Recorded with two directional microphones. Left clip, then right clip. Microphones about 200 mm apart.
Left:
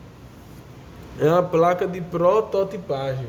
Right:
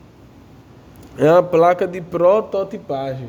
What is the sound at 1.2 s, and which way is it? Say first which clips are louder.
Speech: right 5 dB; 45° right (ahead or behind).